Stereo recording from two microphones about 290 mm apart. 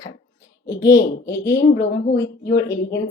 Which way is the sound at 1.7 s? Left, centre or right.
Left.